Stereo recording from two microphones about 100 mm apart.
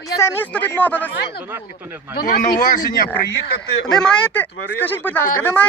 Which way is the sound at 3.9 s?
5° left (ahead or behind).